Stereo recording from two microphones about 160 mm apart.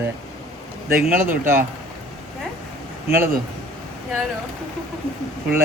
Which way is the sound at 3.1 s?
15° right (ahead or behind).